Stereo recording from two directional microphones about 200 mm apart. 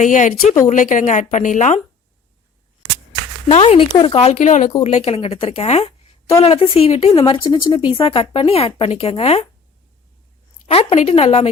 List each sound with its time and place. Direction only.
0.0 s speech: 40° left (ahead or behind)
3.5 s a woman's voice: 30° left (ahead or behind)
10.7 s speech: 30° left (ahead or behind)